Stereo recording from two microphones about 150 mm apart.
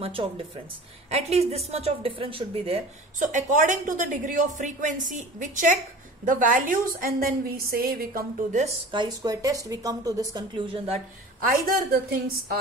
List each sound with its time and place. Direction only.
0.0 s a woman's voice: 35° right (ahead or behind)
3.3 s a woman's voice: 60° right (ahead or behind); by 8.5 s 80° right
8.9 s a woman's voice: 30° right (ahead or behind)
11.4 s a woman's voice: 75° right (ahead or behind)